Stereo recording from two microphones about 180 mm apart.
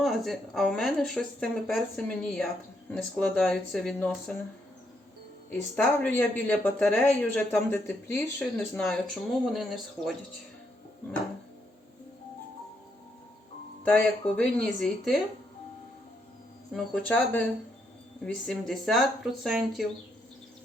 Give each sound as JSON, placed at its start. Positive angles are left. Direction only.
{"t": 0.0, "sound": "speech", "side_deg": 0}
{"t": 5.5, "sound": "speech", "side_deg": 10}
{"t": 14.3, "sound": "speech", "side_deg": 5}
{"t": 16.7, "sound": "speech", "side_deg": 5}